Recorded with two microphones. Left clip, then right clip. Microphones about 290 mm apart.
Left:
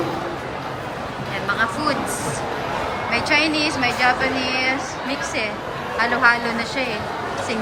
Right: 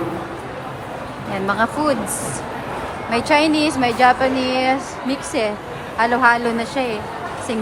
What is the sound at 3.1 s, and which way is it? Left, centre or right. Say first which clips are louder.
Speech: right 3 dB; centre.